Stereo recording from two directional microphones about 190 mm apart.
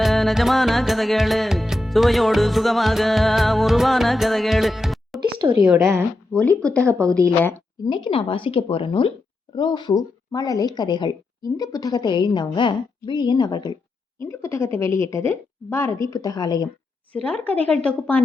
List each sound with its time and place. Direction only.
0.0 s music: centre (ahead or behind)
5.2 s a sound: 25° right (ahead or behind)
5.5 s a woman's voice: 10° right (ahead or behind)
6.3 s a woman's voice: 5° left (ahead or behind)
7.9 s a woman's voice: 25° left (ahead or behind)
17.1 s a woman's voice: 5° left (ahead or behind)